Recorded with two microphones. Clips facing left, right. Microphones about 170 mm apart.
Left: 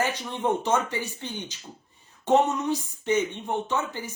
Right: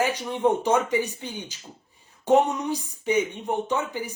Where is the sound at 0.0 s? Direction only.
10° right (ahead or behind).